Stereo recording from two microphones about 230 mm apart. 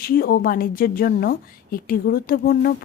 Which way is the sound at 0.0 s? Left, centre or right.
Left.